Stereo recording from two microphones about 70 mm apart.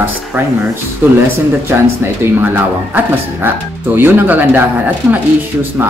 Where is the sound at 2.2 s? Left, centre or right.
Right.